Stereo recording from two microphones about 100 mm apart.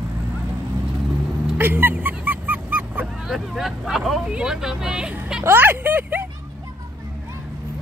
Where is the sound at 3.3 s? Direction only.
Centre (ahead or behind).